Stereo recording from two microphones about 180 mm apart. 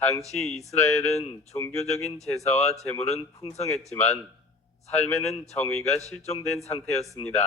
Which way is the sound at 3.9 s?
40° left (ahead or behind).